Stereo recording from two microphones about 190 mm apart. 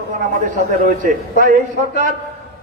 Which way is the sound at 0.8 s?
45° right (ahead or behind).